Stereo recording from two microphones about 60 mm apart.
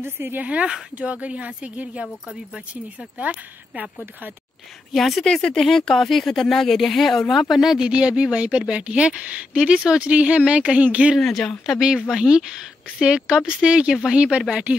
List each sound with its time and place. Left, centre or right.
0.0 s a woman's voice: right
0.4 s speech: right
4.9 s speech: centre; by 11.1 s right
11.1 s speech: centre
11.9 s speech: centre